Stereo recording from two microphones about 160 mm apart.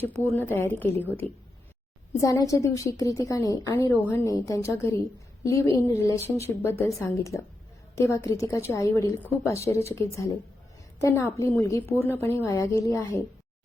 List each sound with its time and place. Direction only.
0.3 s a woman's voice: 15° left (ahead or behind)